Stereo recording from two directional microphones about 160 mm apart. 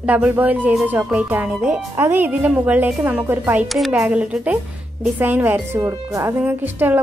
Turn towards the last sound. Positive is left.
turn(degrees=-10)  # may be behind; listen again after turning